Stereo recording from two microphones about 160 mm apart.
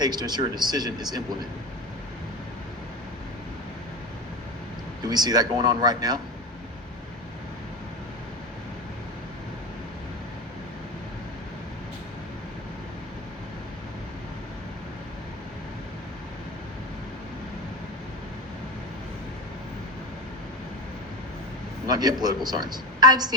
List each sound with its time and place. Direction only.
0.0 s speech: 25° right (ahead or behind)
5.0 s speech: 25° right (ahead or behind)
21.8 s a woman's voice: 25° right (ahead or behind)